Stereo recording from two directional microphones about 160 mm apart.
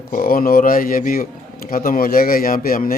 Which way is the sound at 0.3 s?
60° left (ahead or behind).